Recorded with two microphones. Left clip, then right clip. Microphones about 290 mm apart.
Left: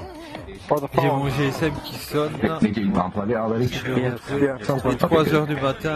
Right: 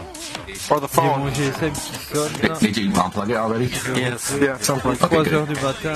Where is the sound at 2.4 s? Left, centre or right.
Right.